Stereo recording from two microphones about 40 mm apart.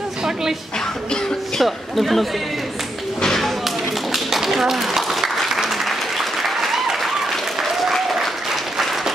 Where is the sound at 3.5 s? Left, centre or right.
Centre.